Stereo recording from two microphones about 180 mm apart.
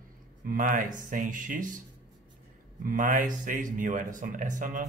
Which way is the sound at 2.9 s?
45° right (ahead or behind).